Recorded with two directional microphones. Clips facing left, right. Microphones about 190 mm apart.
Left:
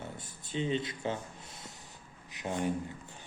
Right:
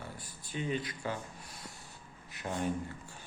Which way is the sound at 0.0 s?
25° left (ahead or behind).